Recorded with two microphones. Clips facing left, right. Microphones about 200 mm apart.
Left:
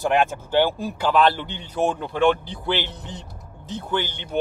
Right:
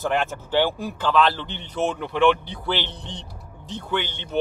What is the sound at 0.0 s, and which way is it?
Speech, 15° left (ahead or behind).